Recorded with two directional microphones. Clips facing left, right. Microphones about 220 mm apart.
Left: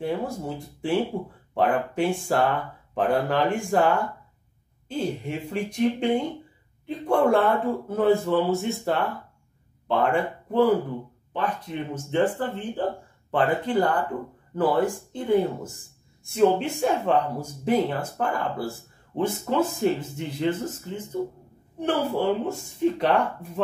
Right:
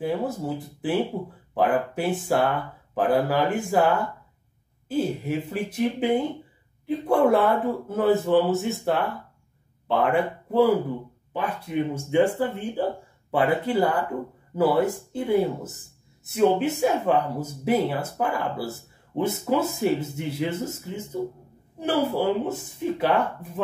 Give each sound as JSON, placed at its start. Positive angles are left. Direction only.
{"t": 0.8, "sound": "speech", "side_deg": -5}
{"t": 7.2, "sound": "speech", "side_deg": -5}